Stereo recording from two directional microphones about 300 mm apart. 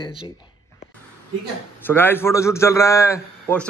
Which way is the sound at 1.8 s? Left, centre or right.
Centre.